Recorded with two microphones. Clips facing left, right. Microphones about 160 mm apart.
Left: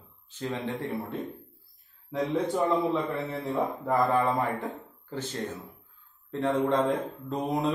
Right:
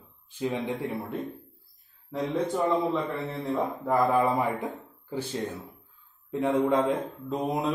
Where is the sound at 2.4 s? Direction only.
Centre (ahead or behind).